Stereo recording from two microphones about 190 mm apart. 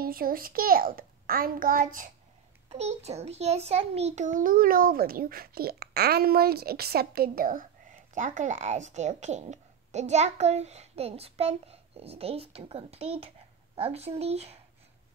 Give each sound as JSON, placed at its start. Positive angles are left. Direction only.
{"t": 0.0, "sound": "a child's voice", "side_deg": -50}
{"t": 2.7, "sound": "a child's voice", "side_deg": -35}